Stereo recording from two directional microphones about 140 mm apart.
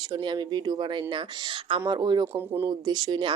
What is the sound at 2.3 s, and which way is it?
Speech, 15° right (ahead or behind).